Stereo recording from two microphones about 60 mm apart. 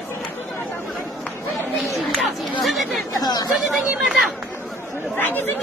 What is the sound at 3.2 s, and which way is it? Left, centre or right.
Speech, left.